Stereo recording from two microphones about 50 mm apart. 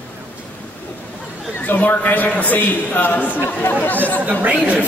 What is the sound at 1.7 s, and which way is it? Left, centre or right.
A man's voice, left.